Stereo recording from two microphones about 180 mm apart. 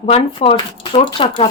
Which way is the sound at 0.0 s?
30° left (ahead or behind).